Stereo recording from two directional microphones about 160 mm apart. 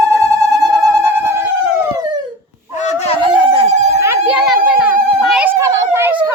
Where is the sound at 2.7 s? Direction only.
45° left (ahead or behind).